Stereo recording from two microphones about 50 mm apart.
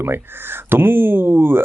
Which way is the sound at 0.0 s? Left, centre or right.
Right.